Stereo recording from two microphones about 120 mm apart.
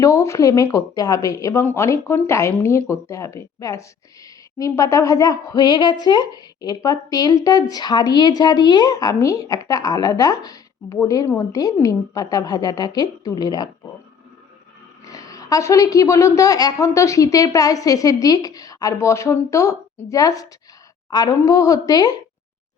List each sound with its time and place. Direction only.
0.0 s a woman's voice: 25° left (ahead or behind)
15.0 s a woman's voice: 30° left (ahead or behind)